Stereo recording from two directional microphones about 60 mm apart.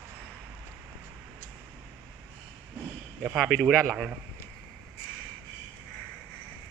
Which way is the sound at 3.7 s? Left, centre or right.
Centre.